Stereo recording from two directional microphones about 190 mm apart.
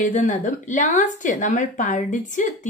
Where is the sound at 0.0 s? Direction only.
40° left (ahead or behind).